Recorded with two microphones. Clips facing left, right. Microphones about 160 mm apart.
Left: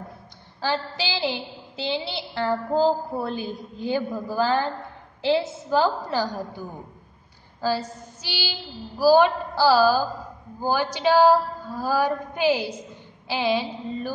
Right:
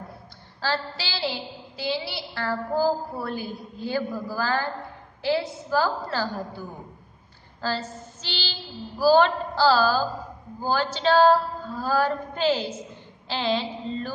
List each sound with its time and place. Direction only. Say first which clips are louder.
0.6 s a woman's voice: left 2 dB; 15° left (ahead or behind)
7.6 s a woman's voice: left 4 dB; 10° left (ahead or behind)